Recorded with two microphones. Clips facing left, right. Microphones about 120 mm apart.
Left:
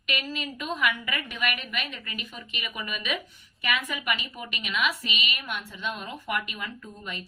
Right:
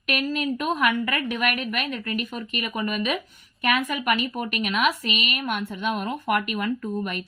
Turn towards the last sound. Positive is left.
turn(degrees=-60)  # may be behind; listen again after turning